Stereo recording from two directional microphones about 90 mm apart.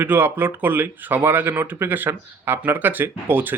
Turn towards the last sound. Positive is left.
turn(degrees=-20)  # may be behind; listen again after turning